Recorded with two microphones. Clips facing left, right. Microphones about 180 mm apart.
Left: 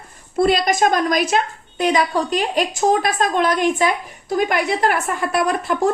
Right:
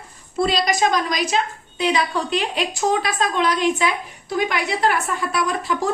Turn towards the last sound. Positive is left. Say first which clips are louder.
# left 4 dB
turn(degrees=55)  # may be behind; listen again after turning